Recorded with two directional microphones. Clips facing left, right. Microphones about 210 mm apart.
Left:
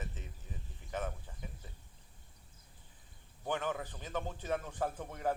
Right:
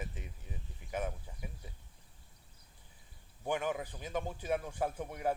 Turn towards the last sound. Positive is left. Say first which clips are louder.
# right 1 dB
turn(degrees=-10)  # may be behind; listen again after turning